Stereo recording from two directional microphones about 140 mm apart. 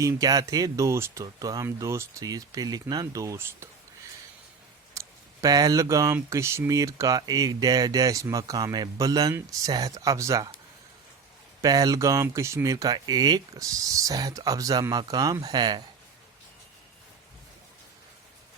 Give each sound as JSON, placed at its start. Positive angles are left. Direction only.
{"t": 0.0, "sound": "speech", "side_deg": -25}
{"t": 4.9, "sound": "speech", "side_deg": -25}
{"t": 11.6, "sound": "speech", "side_deg": -25}